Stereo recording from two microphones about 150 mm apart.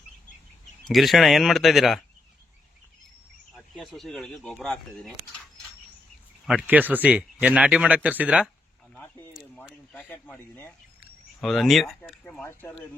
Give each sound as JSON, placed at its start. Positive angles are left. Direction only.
{"t": 0.9, "sound": "speech", "side_deg": 0}
{"t": 3.5, "sound": "speech", "side_deg": 0}
{"t": 6.4, "sound": "speech", "side_deg": -5}
{"t": 9.9, "sound": "speech", "side_deg": 10}
{"t": 11.3, "sound": "speech", "side_deg": 0}
{"t": 12.4, "sound": "speech", "side_deg": 15}